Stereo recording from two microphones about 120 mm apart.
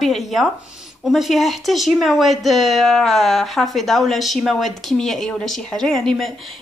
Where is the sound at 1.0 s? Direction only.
Centre (ahead or behind).